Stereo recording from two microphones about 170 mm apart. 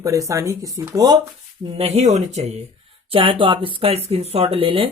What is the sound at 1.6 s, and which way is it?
Speech, 35° right (ahead or behind).